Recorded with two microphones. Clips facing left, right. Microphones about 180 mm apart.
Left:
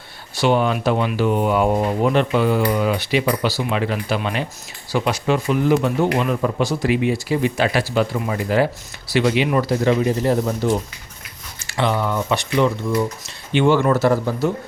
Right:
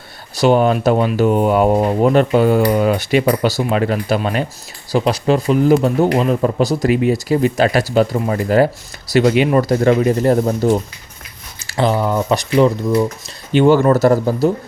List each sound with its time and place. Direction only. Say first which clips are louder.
0.3 s speech: right 5 dB; 40° right (ahead or behind)